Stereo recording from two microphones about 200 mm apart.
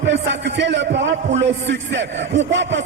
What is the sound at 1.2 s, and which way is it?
Speech, 30° right (ahead or behind).